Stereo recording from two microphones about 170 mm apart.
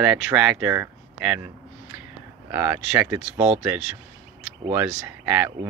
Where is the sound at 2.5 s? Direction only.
10° right (ahead or behind).